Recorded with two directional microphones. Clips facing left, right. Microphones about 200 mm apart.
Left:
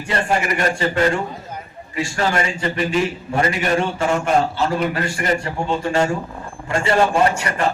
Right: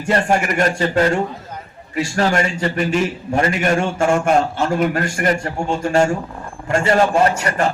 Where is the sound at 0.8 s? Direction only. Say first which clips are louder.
Right 2 dB; 40° right (ahead or behind).